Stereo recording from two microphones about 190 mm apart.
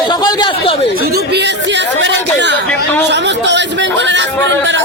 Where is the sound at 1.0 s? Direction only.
55° right (ahead or behind).